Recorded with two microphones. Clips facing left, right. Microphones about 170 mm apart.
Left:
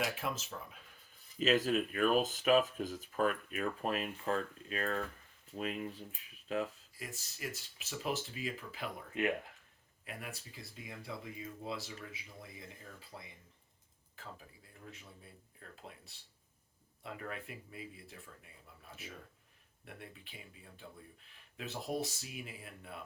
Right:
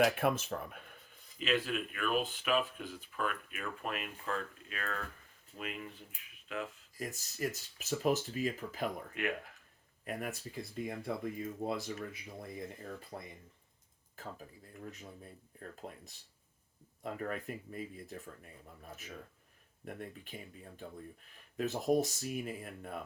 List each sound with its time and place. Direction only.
0.0 s speech: 55° right (ahead or behind)
1.4 s speech: 40° left (ahead or behind)
6.9 s speech: 45° right (ahead or behind)
10.0 s speech: 45° right (ahead or behind)